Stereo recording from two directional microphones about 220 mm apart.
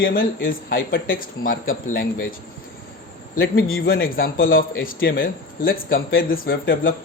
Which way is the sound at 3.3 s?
40° left (ahead or behind).